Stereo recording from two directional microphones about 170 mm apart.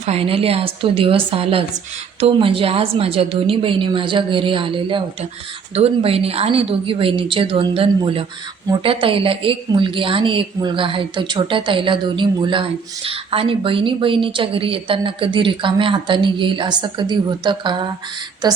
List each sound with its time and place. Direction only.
0.0 s a woman's voice: 35° right (ahead or behind)